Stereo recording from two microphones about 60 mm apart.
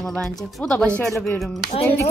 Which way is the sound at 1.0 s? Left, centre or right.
Left.